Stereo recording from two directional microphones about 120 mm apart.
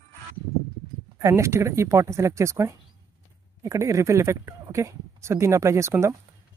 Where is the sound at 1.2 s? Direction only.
25° right (ahead or behind).